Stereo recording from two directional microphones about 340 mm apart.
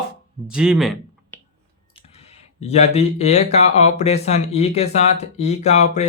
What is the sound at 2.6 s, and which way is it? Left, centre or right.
Speech, centre.